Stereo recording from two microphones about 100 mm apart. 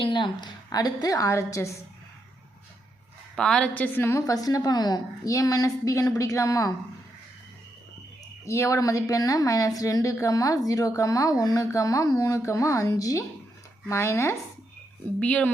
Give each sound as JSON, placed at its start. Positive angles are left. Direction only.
{"t": 0.0, "sound": "a woman's voice", "side_deg": 55}
{"t": 3.3, "sound": "a woman's voice", "side_deg": 5}
{"t": 8.4, "sound": "a woman's voice", "side_deg": 30}
{"t": 15.2, "sound": "speech", "side_deg": 15}